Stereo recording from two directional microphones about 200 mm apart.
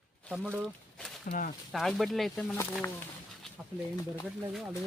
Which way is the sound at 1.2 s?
45° left (ahead or behind).